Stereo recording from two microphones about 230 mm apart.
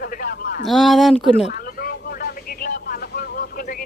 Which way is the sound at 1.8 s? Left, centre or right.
Left.